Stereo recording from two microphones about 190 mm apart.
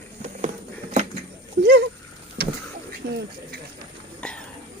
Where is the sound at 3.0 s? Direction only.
60° right (ahead or behind).